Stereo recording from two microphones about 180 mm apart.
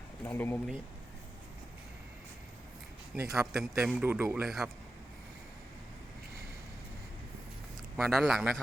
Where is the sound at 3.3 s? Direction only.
Centre (ahead or behind).